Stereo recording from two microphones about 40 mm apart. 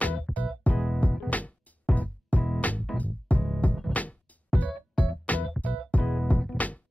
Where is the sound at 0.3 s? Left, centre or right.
Centre.